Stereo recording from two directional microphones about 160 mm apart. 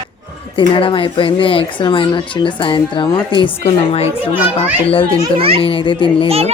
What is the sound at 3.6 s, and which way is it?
Speech, 40° left (ahead or behind).